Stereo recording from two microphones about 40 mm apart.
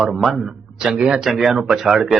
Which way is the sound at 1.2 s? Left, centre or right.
Centre.